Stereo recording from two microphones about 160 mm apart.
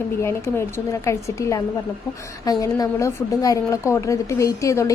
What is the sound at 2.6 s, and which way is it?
A woman's voice, 20° left (ahead or behind).